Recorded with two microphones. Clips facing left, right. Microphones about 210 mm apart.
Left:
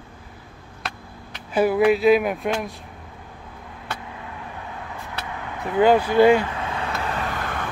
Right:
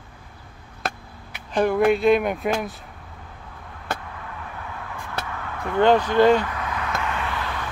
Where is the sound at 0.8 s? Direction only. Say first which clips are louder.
Right 5 dB; 45° right (ahead or behind).